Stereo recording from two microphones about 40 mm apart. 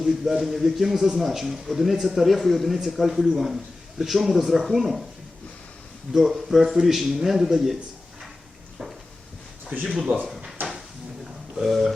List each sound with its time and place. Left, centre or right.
0.0 s a man's voice: centre
6.1 s a man's voice: centre
10.6 s drawer open or close: right
11.5 s a man's voice: centre